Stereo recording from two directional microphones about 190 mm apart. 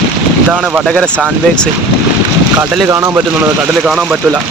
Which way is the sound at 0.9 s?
5° left (ahead or behind).